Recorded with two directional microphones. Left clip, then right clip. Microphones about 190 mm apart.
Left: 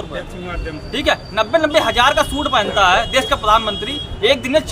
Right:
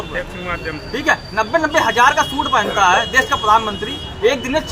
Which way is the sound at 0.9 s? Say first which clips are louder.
Even; 45° left (ahead or behind).